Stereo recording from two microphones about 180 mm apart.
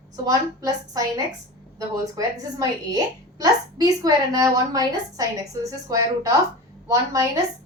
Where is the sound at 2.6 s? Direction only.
20° right (ahead or behind).